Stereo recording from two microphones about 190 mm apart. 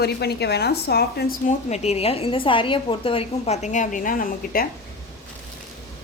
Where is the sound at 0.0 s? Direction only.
60° left (ahead or behind).